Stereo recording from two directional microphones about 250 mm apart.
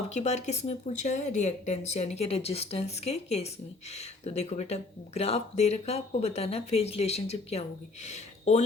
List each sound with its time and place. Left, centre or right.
0.1 s speech: left